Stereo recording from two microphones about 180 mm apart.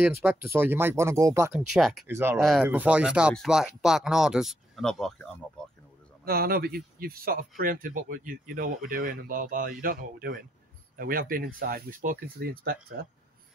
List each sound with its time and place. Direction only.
0.0 s speech: 10° right (ahead or behind)
1.5 s speech: centre (ahead or behind)
2.0 s speech: 15° right (ahead or behind)
2.3 s speech: centre (ahead or behind)
6.2 s speech: 60° right (ahead or behind)